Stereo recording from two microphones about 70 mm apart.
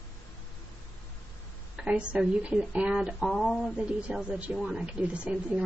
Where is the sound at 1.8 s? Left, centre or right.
Centre.